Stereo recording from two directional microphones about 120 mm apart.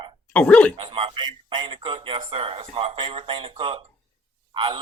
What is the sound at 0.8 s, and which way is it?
Speech, 45° right (ahead or behind).